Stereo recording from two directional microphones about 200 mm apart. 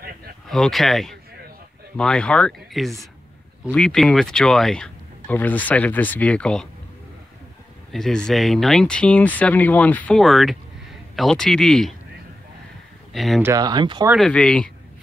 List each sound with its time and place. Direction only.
0.5 s speech: centre (ahead or behind)
7.9 s speech: centre (ahead or behind)
13.1 s speech: centre (ahead or behind)
13.4 s speech: 15° right (ahead or behind)
14.1 s speech: 5° left (ahead or behind)